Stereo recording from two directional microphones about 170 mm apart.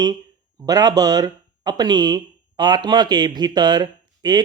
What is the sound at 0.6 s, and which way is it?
Speech, 20° right (ahead or behind).